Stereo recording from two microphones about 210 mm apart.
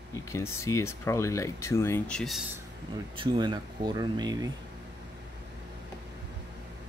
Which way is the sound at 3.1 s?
25° right (ahead or behind).